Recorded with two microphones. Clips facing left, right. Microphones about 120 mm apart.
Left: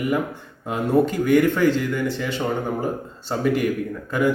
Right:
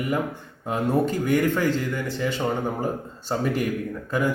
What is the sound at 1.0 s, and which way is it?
Speech, 40° right (ahead or behind).